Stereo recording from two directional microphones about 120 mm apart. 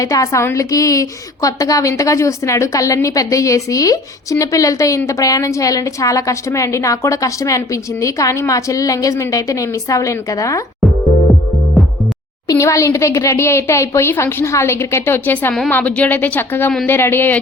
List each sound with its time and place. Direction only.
0.0 s a woman's voice: 25° left (ahead or behind)
12.5 s a woman's voice: 25° left (ahead or behind)